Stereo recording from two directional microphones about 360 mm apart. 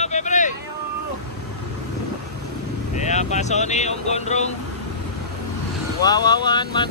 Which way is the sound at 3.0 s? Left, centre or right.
Centre.